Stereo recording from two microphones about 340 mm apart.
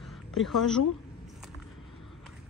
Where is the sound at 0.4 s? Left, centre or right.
Centre.